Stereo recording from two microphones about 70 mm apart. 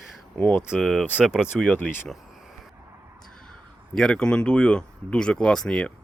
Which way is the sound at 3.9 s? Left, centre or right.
Centre.